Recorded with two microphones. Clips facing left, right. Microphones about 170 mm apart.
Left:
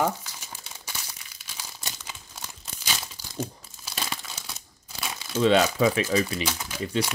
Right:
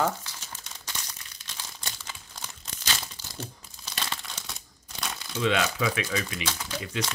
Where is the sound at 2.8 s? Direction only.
10° left (ahead or behind).